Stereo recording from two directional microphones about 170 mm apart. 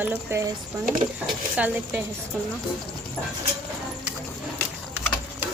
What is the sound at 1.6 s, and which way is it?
Speech, 10° right (ahead or behind).